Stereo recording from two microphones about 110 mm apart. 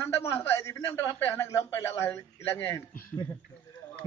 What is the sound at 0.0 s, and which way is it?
A man's voice, 25° left (ahead or behind).